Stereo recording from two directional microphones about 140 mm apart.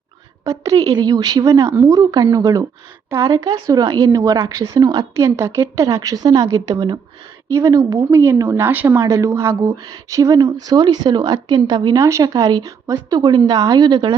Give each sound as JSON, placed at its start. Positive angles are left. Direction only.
{"t": 0.4, "sound": "a woman's voice", "side_deg": -25}